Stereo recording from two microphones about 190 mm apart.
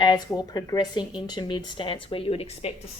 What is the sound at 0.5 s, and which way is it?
A woman's voice, 20° left (ahead or behind).